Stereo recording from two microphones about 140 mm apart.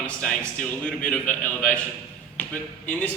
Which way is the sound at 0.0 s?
5° left (ahead or behind).